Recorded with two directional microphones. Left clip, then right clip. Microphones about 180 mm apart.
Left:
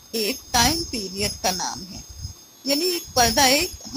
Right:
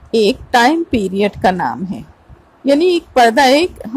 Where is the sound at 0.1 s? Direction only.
40° right (ahead or behind).